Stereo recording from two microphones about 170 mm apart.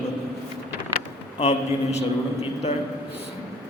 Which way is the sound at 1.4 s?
40° left (ahead or behind).